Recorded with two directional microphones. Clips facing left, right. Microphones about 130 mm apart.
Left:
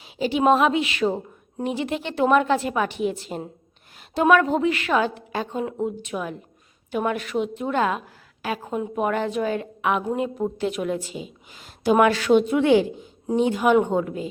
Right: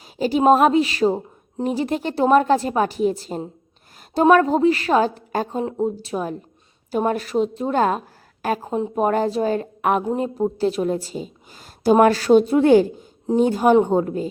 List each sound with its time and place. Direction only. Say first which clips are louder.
0.2 s a woman's voice: right 3 dB; 40° right (ahead or behind)